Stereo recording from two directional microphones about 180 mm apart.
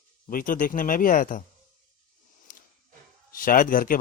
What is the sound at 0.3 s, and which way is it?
A man's voice, 50° left (ahead or behind).